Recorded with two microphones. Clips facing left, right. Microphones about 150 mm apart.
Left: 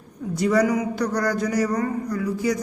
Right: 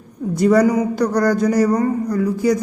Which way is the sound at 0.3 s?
45° right (ahead or behind).